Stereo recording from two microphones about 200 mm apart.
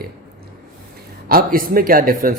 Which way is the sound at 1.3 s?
45° right (ahead or behind).